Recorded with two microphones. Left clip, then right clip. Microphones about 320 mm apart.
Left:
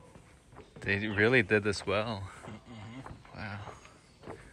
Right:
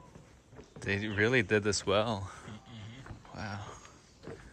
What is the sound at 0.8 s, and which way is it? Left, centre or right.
Speech, centre.